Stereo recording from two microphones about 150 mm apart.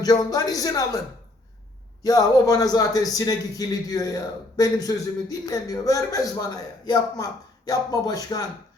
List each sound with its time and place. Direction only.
0.0 s a man's voice: 25° left (ahead or behind)
2.0 s a man's voice: 25° left (ahead or behind)